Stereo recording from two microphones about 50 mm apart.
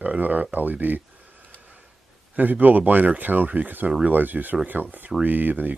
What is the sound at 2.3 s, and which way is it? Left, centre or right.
Speech, right.